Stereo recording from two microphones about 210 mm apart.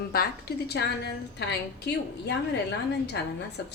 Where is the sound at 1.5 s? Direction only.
55° left (ahead or behind).